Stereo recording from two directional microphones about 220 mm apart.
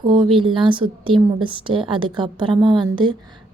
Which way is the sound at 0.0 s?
20° right (ahead or behind).